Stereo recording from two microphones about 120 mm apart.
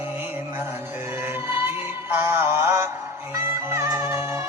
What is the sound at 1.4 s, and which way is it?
Music, 20° right (ahead or behind).